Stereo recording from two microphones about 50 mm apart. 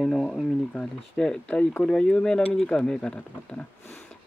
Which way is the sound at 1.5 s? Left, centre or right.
Left.